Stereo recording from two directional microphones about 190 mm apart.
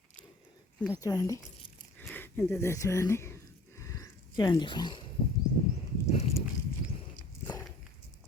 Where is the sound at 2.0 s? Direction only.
10° left (ahead or behind).